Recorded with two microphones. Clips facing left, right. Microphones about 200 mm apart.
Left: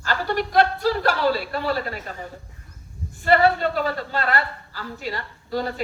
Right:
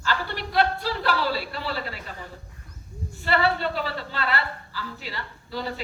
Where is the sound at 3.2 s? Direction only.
45° left (ahead or behind).